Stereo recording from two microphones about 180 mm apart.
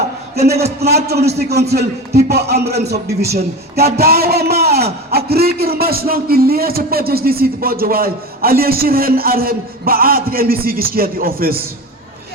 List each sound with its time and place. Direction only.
0.8 s a man's voice: 60° right (ahead or behind)